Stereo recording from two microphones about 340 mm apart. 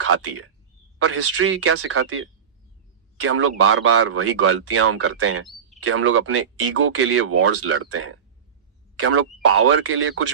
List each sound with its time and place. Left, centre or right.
0.0 s speech: right